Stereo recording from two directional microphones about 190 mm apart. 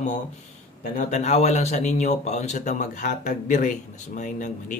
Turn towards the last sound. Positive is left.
turn(degrees=40)  # may be behind; listen again after turning